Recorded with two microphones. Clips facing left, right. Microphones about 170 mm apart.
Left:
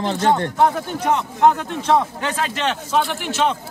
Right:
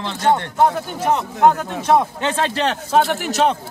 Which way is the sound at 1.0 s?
10° right (ahead or behind).